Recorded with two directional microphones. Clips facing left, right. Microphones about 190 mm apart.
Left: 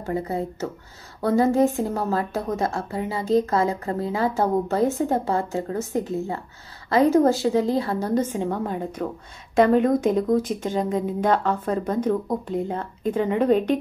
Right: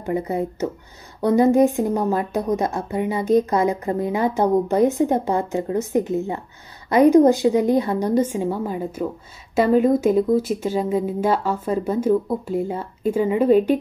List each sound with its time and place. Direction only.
0.0 s a woman's voice: 15° right (ahead or behind)